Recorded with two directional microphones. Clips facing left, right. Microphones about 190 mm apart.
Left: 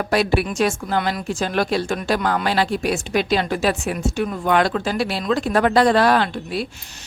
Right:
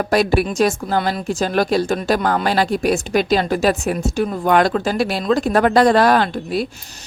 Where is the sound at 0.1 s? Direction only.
40° right (ahead or behind).